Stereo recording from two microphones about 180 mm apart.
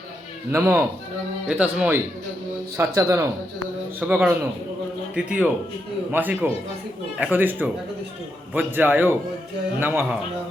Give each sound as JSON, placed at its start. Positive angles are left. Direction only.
{"t": 0.5, "sound": "a man's voice", "side_deg": -15}